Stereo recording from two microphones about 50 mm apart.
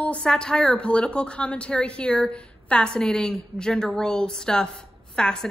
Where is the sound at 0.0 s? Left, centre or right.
Left.